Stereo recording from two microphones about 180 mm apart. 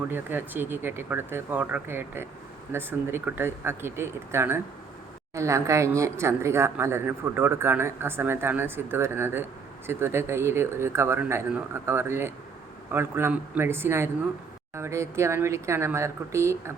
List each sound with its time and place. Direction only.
0.1 s a woman's voice: 10° right (ahead or behind)